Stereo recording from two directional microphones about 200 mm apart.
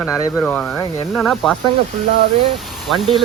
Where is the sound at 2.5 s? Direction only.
Centre (ahead or behind).